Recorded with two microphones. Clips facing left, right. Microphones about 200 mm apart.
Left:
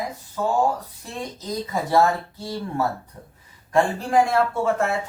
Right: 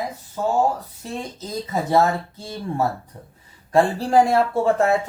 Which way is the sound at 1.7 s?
20° right (ahead or behind).